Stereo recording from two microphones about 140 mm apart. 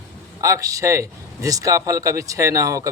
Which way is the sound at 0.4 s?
25° right (ahead or behind).